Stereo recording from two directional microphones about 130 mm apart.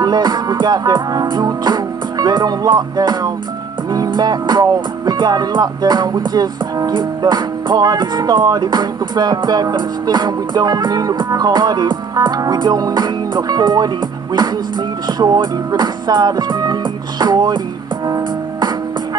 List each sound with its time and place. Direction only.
0.0 s music: 35° right (ahead or behind)
15.1 s music: 35° right (ahead or behind)